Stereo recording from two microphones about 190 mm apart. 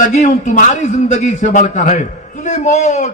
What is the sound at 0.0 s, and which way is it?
A man's voice, 40° left (ahead or behind).